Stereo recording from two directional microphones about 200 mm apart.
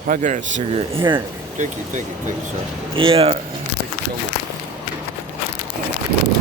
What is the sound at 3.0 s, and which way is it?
Speech, 25° right (ahead or behind).